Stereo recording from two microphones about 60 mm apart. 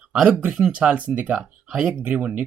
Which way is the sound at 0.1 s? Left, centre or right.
Centre.